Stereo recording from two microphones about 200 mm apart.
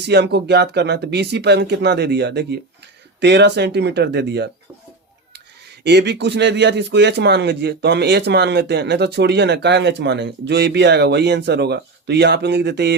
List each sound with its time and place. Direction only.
0.0 s speech: 55° right (ahead or behind)
5.8 s speech: 60° right (ahead or behind)